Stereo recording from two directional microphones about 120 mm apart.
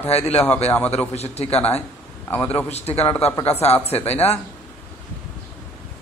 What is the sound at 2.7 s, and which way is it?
Speech, 60° left (ahead or behind).